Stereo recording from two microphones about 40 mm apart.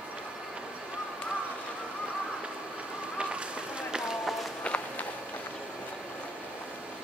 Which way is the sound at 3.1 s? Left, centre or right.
Right.